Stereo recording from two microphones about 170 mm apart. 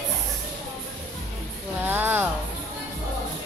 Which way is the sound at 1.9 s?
10° right (ahead or behind).